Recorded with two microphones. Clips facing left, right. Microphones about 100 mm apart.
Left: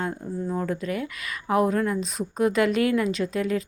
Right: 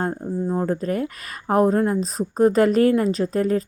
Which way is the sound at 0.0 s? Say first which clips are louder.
Right 5 dB; 35° right (ahead or behind).